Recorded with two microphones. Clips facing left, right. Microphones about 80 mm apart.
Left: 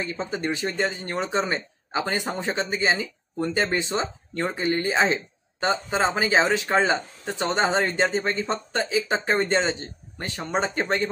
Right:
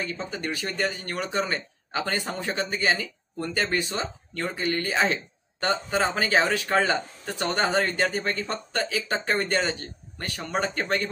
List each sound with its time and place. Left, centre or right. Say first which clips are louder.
0.0 s speech: left 3 dB; left